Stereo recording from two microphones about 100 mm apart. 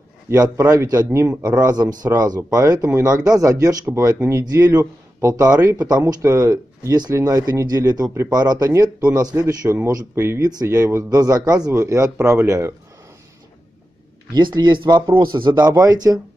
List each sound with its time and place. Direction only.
0.3 s speech: 35° right (ahead or behind)
5.6 s speech: 20° right (ahead or behind)
5.9 s speech: 40° right (ahead or behind)
10.1 s speech: 25° right (ahead or behind)
10.5 s speech: 35° right (ahead or behind)
14.3 s speech: 45° right (ahead or behind)
15.6 s speech: 35° right (ahead or behind)